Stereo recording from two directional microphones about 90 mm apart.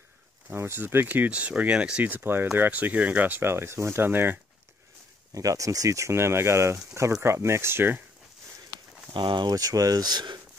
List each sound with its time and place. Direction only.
0.5 s speech: 25° right (ahead or behind)
5.3 s speech: 40° right (ahead or behind)
9.1 s speech: 60° right (ahead or behind)
9.5 s speech: 40° right (ahead or behind)